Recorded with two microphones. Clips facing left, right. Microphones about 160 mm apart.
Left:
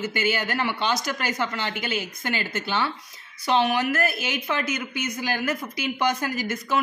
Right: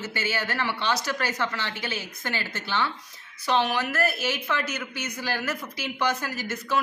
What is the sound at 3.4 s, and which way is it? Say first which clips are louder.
Speech: left 3 dB; 15° left (ahead or behind).